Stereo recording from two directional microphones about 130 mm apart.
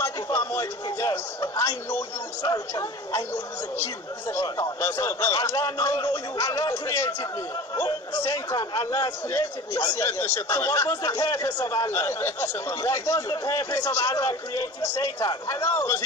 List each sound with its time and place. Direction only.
0.0 s a man's voice: 20° left (ahead or behind)